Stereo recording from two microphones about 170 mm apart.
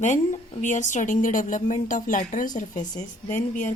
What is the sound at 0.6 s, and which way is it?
A woman's voice, 45° left (ahead or behind).